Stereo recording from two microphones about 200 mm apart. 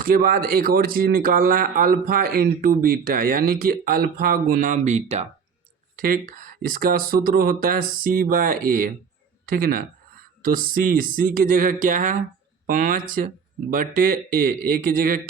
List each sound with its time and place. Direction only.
0.0 s speech: 45° right (ahead or behind)
6.0 s speech: 45° right (ahead or behind)